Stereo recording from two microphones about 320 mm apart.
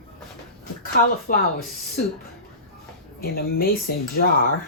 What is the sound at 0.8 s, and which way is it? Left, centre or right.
Speech, left.